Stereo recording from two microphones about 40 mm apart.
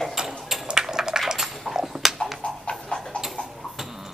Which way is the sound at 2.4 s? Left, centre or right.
Left.